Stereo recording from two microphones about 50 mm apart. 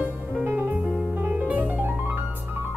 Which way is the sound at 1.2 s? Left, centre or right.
Right.